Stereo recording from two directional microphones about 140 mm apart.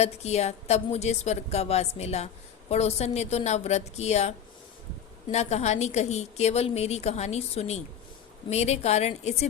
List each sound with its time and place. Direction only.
0.0 s a woman's voice: 50° left (ahead or behind)